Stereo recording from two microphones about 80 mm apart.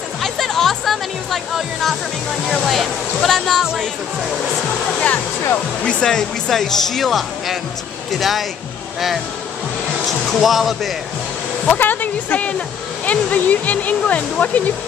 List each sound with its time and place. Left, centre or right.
0.2 s music: centre
2.5 s speech: centre
5.0 s speech: left; by 8.5 s centre
10.0 s speech: centre
11.7 s speech: left